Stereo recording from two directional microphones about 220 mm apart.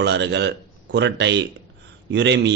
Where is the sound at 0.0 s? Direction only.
50° right (ahead or behind).